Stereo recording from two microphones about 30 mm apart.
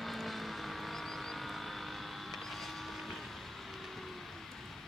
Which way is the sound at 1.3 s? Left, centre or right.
Centre.